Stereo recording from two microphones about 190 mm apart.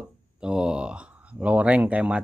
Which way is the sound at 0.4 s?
5° right (ahead or behind).